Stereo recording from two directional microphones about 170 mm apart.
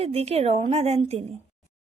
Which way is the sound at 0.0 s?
35° right (ahead or behind).